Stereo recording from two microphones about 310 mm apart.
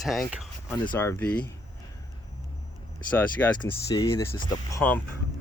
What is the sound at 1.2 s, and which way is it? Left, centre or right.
Speech, left.